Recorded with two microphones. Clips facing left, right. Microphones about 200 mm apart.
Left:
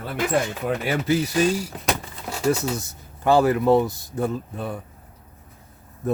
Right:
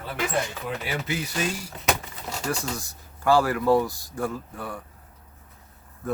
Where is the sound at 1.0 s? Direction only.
35° left (ahead or behind).